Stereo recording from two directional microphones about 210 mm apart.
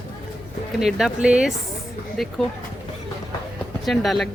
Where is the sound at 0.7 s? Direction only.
Centre (ahead or behind).